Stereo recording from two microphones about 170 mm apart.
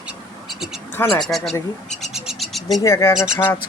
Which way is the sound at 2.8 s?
15° left (ahead or behind).